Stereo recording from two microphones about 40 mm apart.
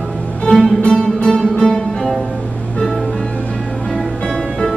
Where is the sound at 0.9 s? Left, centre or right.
Centre.